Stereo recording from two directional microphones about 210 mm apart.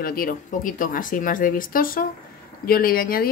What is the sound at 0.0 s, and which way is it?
A woman's voice, 45° left (ahead or behind).